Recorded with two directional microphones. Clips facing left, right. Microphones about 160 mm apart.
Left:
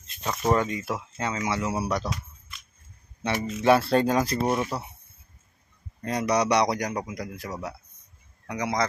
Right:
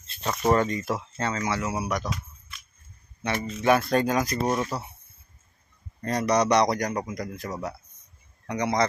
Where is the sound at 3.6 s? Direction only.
30° left (ahead or behind).